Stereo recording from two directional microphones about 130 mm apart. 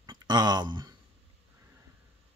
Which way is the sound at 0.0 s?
35° right (ahead or behind).